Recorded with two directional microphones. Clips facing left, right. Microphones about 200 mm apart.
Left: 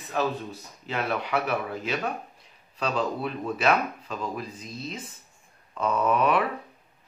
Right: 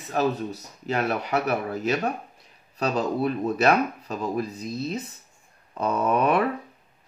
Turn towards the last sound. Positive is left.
turn(degrees=-40)  # may be behind; listen again after turning